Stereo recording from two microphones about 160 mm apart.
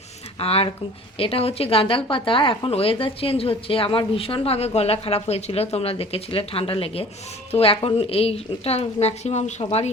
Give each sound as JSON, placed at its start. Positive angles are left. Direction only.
{"t": 0.3, "sound": "speech", "side_deg": 35}